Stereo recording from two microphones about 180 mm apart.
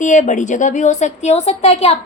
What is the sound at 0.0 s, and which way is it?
A woman's voice, 45° left (ahead or behind).